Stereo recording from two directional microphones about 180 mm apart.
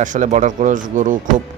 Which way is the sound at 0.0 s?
45° right (ahead or behind).